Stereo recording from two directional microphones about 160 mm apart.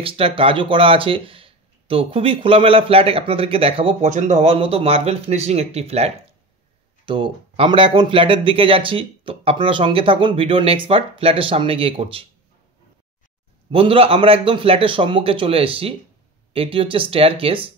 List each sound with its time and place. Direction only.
0.0 s speech: 35° right (ahead or behind)
4.1 s speech: 45° right (ahead or behind)
13.7 s speech: 35° right (ahead or behind)